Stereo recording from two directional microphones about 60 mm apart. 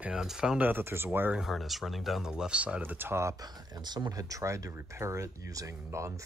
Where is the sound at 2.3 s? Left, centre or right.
Centre.